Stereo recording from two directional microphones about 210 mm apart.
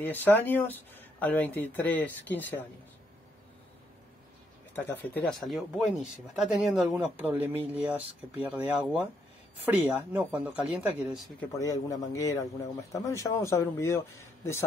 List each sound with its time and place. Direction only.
0.0 s speech: 10° left (ahead or behind)
4.7 s speech: 10° left (ahead or behind)
11.3 s speech: 15° left (ahead or behind)